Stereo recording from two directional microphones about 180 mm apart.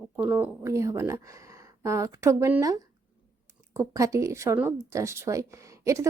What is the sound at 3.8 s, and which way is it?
A woman's voice, 15° right (ahead or behind).